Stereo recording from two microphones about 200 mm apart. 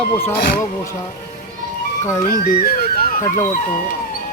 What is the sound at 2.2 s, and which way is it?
Speech, 45° left (ahead or behind).